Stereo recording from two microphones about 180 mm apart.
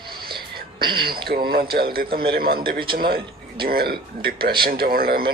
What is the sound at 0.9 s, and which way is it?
Speech, 55° right (ahead or behind).